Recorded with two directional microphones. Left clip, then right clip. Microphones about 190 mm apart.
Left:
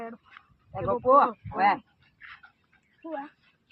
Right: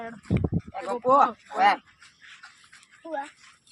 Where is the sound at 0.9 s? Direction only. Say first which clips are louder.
Even; 35° right (ahead or behind).